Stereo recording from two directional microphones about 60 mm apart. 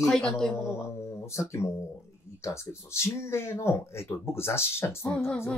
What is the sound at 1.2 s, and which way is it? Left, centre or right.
Speech, left.